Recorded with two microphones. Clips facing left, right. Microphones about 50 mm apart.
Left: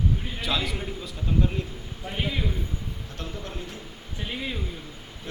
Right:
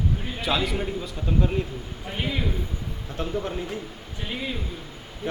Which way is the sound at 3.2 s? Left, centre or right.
Right.